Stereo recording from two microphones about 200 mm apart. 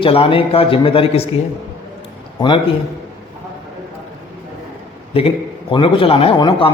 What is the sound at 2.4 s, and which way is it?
Speech, 25° left (ahead or behind).